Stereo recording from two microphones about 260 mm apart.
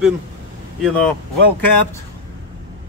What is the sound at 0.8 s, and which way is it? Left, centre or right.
Speech, centre.